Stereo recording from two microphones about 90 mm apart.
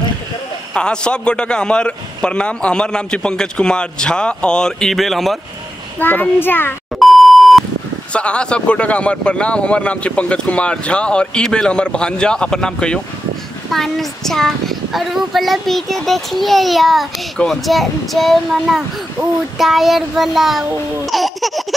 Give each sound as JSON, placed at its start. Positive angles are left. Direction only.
{"t": 0.7, "sound": "speech", "side_deg": 10}
{"t": 5.9, "sound": "a child's voice", "side_deg": 20}
{"t": 7.0, "sound": "beep", "side_deg": 0}
{"t": 8.1, "sound": "speech", "side_deg": 10}
{"t": 21.1, "sound": "laughter", "side_deg": 0}